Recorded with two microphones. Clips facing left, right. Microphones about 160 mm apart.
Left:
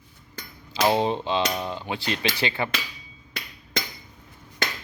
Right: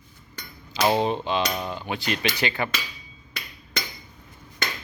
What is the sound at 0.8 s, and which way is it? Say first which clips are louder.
Cap gun: even; 25° left (ahead or behind).